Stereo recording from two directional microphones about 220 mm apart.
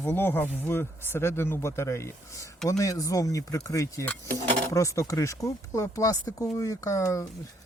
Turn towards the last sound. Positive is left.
turn(degrees=15)  # may be behind; listen again after turning